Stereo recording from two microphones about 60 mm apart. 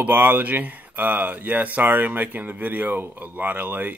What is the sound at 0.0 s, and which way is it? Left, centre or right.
Speech, right.